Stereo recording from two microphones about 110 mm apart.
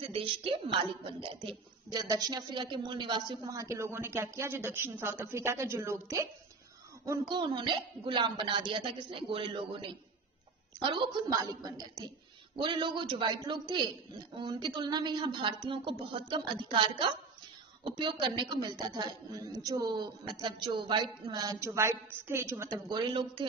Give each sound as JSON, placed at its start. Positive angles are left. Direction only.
{"t": 0.1, "sound": "a woman's voice", "side_deg": -55}
{"t": 7.3, "sound": "a child's voice", "side_deg": -45}
{"t": 11.2, "sound": "speech", "side_deg": -35}
{"t": 12.5, "sound": "a child's voice", "side_deg": -45}
{"t": 21.5, "sound": "a woman's voice", "side_deg": -25}
{"t": 22.8, "sound": "a child's voice", "side_deg": -45}